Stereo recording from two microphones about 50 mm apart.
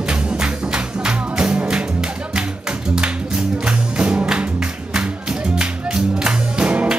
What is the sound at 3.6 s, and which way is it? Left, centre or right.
Music, right.